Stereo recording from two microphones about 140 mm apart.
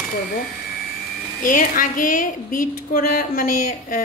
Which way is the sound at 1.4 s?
75° left (ahead or behind).